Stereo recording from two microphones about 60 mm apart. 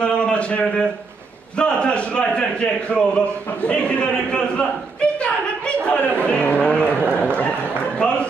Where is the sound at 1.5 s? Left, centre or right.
Centre.